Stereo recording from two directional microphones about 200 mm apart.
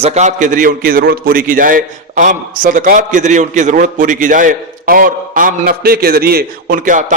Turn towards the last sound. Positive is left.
turn(degrees=-40)  # may be behind; listen again after turning